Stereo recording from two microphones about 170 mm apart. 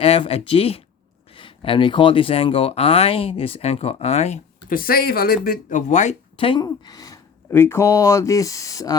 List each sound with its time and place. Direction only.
0.0 s speech: 35° left (ahead or behind)
4.7 s speech: 60° left (ahead or behind); by 6.1 s 45° left (ahead or behind)
6.3 s speech: 30° left (ahead or behind)